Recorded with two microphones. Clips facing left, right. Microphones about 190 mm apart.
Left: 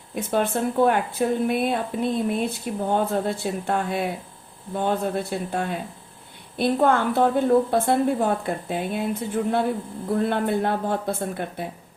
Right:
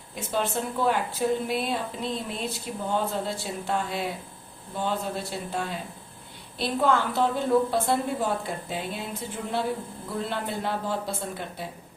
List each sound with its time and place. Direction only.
0.2 s a woman's voice: 55° left (ahead or behind)